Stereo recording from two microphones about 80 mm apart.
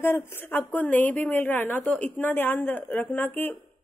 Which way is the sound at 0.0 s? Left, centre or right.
Left.